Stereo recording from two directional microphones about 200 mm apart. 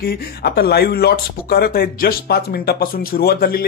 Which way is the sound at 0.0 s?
50° left (ahead or behind).